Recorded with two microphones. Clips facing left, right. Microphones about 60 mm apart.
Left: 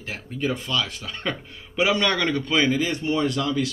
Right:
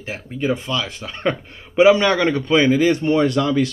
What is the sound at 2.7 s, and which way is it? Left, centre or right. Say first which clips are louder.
Speech: right 8 dB; right.